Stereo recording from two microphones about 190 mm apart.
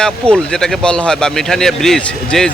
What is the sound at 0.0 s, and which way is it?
Speech, 5° left (ahead or behind).